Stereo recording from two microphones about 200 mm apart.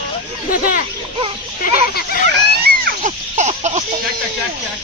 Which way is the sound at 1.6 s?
45° left (ahead or behind).